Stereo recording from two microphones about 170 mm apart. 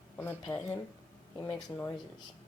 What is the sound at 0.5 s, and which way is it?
Speech, 10° left (ahead or behind).